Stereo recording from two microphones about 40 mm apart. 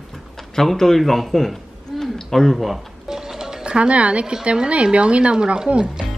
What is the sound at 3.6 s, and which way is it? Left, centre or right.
Speech, right.